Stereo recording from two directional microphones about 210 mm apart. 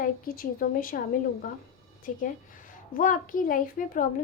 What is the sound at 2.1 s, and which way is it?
A woman's voice, 35° left (ahead or behind).